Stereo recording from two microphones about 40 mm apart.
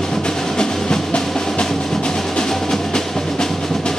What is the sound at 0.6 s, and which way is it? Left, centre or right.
Music, left.